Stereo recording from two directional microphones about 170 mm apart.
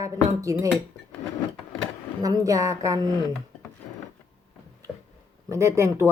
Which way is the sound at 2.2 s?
20° right (ahead or behind).